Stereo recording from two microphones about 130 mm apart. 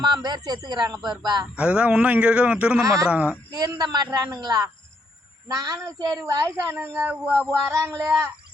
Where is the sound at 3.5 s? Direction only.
30° right (ahead or behind); by 7.5 s 10° right (ahead or behind).